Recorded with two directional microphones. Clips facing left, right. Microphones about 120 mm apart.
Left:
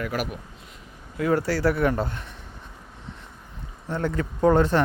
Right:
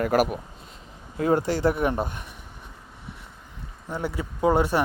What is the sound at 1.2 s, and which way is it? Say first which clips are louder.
Speech: right 1 dB; 25° right (ahead or behind).